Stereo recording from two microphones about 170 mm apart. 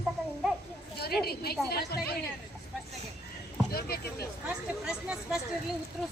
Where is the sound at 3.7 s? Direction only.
65° left (ahead or behind).